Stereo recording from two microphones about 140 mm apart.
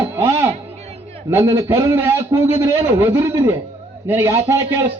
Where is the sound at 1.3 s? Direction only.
20° right (ahead or behind).